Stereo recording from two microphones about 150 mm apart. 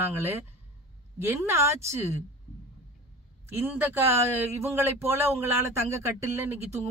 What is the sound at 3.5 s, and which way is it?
A man's voice, 15° right (ahead or behind).